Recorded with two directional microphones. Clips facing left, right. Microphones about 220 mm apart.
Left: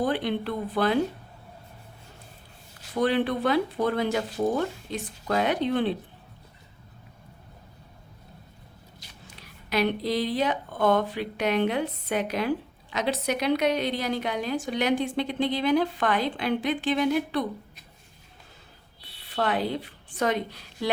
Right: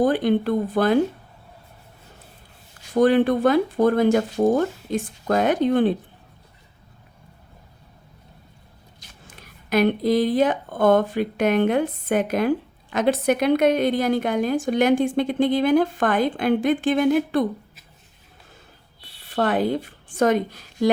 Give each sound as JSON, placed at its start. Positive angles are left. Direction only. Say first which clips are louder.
{"t": 0.0, "sound": "speech", "louder": "right 7 dB", "side_deg": -45}
{"t": 2.9, "sound": "speech", "louder": "right 7 dB", "side_deg": -45}
{"t": 9.0, "sound": "speech", "louder": "right 3 dB", "side_deg": -50}
{"t": 19.2, "sound": "a woman's voice", "louder": "right 6 dB", "side_deg": -50}